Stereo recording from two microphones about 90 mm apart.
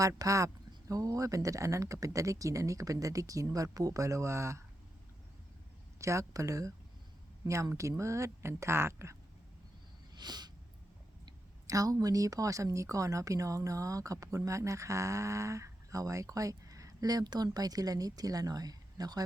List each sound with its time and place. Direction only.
0.2 s speech: 40° right (ahead or behind)
6.0 s speech: 35° right (ahead or behind)
10.2 s a sound: 50° right (ahead or behind)
11.6 s speech: 40° right (ahead or behind)